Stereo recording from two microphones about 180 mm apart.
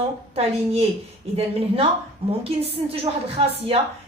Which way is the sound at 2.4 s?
35° right (ahead or behind).